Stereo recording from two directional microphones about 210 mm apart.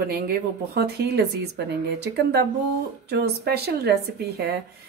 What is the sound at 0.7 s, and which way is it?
Speech, 50° right (ahead or behind).